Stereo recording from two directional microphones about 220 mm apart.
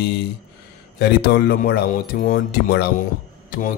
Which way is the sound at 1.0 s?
45° left (ahead or behind).